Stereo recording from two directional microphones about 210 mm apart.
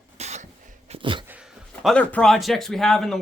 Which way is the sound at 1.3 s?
5° right (ahead or behind).